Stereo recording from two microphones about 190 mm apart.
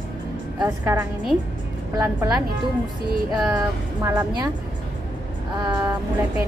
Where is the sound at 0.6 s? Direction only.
10° right (ahead or behind).